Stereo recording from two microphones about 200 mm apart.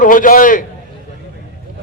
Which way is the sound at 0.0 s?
40° left (ahead or behind).